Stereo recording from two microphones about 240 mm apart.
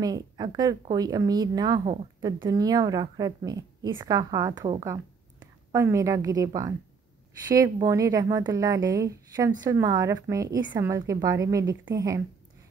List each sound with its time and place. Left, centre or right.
0.0 s a woman's voice: centre